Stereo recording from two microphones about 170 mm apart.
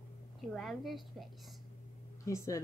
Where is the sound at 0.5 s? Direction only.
Centre (ahead or behind).